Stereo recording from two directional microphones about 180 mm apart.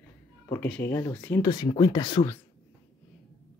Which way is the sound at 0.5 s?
10° left (ahead or behind).